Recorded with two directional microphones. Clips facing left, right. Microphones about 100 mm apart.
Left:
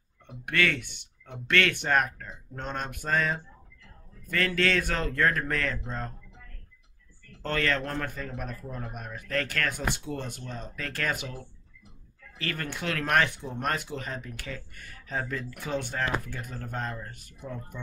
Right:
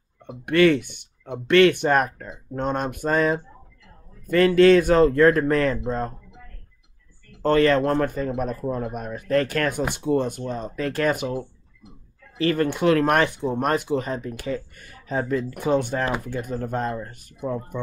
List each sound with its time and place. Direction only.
0.5 s speech: 25° right (ahead or behind)
7.4 s speech: 25° right (ahead or behind)
12.4 s speech: 25° right (ahead or behind)